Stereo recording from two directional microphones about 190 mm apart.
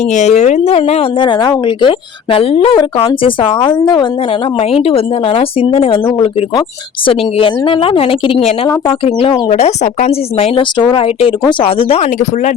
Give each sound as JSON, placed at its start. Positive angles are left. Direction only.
{"t": 0.1, "sound": "a woman's voice", "side_deg": 35}
{"t": 7.0, "sound": "a woman's voice", "side_deg": 30}